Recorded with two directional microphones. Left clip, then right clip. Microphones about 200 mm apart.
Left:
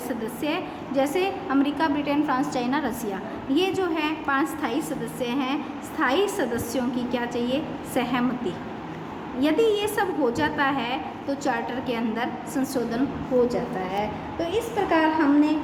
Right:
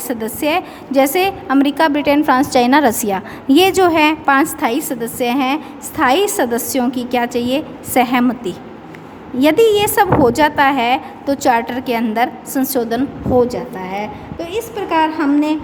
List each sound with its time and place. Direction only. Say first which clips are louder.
0.1 s a woman's voice: right 12 dB; 55° right (ahead or behind)